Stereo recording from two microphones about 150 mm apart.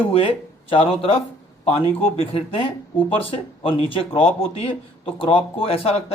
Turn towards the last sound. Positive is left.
turn(degrees=40)  # may be behind; listen again after turning